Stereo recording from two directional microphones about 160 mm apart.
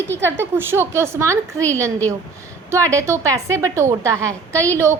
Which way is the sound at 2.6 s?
20° right (ahead or behind).